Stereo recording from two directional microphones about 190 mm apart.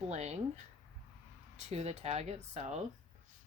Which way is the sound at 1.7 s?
35° right (ahead or behind).